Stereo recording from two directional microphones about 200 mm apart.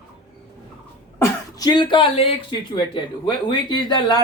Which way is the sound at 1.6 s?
20° left (ahead or behind).